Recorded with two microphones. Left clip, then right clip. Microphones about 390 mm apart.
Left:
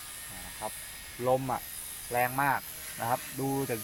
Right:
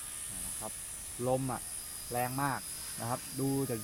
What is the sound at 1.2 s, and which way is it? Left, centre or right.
Speech, left.